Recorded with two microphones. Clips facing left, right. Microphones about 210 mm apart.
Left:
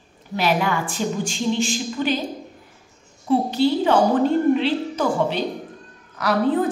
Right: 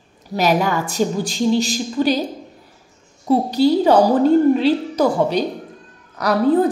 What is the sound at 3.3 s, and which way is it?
A woman's voice, 40° right (ahead or behind).